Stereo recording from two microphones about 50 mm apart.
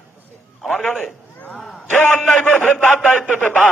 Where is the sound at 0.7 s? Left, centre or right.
Left.